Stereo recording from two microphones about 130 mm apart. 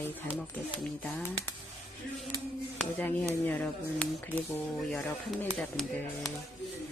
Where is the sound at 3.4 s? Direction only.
10° left (ahead or behind).